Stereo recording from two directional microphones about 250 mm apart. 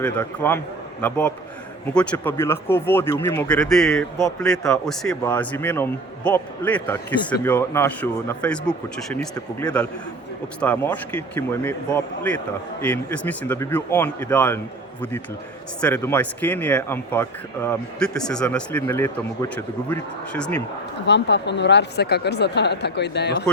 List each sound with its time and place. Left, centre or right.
0.0 s speech: centre
15.8 s speech: centre
21.1 s speech: left